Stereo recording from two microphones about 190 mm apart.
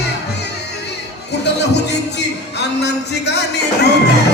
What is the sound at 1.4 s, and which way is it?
Music, 60° left (ahead or behind).